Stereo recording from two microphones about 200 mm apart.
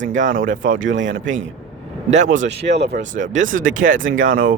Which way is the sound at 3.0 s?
40° right (ahead or behind).